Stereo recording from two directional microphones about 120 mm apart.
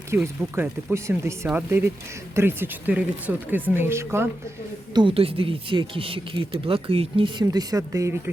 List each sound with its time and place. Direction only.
0.1 s speech: 15° right (ahead or behind)
4.9 s speech: 50° right (ahead or behind)
7.4 s speech: 30° right (ahead or behind)